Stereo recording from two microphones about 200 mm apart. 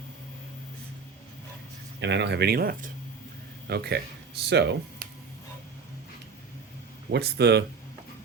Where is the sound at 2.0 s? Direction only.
60° right (ahead or behind).